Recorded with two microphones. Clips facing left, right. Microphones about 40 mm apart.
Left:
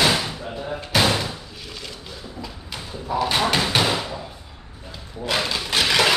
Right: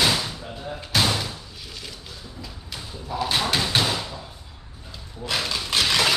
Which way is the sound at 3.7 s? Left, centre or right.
Centre.